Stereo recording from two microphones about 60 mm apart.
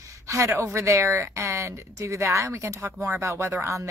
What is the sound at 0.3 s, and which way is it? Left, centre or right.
A woman's voice, right.